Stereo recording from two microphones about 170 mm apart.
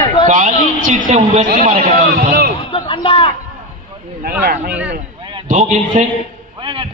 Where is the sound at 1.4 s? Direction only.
55° right (ahead or behind).